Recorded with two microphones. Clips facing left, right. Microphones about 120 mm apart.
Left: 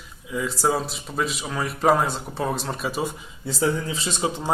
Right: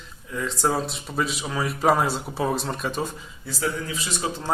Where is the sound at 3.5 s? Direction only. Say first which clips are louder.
Left 4 dB; 25° left (ahead or behind).